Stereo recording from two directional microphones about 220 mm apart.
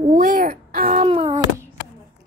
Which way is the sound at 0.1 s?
35° right (ahead or behind).